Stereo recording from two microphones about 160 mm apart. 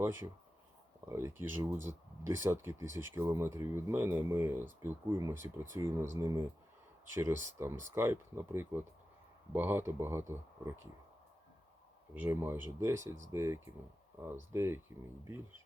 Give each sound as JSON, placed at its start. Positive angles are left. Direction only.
{"t": 0.0, "sound": "speech", "side_deg": -15}
{"t": 12.1, "sound": "speech", "side_deg": -10}